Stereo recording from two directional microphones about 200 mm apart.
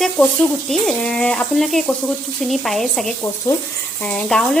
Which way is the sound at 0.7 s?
5° left (ahead or behind).